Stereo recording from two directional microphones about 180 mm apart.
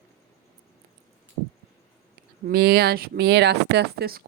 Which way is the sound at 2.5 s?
60° right (ahead or behind).